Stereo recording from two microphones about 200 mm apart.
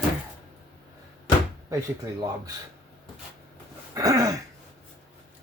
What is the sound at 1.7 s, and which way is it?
Speech, 15° right (ahead or behind).